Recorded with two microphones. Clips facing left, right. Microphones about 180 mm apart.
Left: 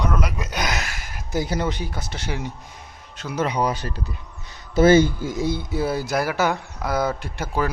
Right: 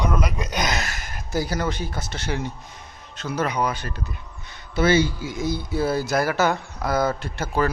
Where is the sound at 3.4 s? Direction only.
35° left (ahead or behind).